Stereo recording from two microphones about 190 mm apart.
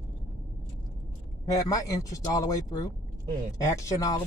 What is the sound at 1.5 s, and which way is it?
Speech, 15° left (ahead or behind).